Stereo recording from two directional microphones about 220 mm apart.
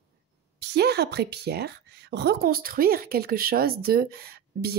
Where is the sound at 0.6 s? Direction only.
45° right (ahead or behind).